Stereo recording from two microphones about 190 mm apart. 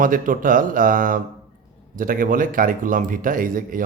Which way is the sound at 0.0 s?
45° right (ahead or behind).